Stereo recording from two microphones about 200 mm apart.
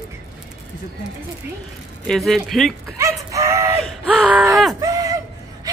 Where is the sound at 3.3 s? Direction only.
15° right (ahead or behind).